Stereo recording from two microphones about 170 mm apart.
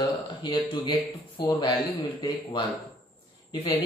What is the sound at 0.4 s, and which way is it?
Speech, 25° left (ahead or behind).